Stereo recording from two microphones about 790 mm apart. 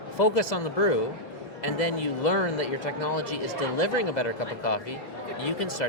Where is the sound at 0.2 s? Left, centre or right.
Left.